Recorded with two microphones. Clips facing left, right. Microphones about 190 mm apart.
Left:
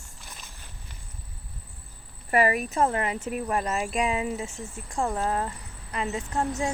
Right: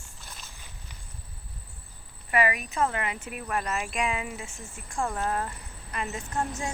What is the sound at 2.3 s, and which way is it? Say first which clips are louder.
Speech: left 3 dB; 40° left (ahead or behind).